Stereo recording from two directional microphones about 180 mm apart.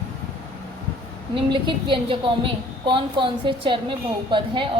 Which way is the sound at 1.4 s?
25° right (ahead or behind).